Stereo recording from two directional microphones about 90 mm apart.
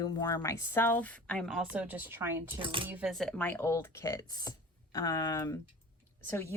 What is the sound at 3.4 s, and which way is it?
Speech, 20° left (ahead or behind).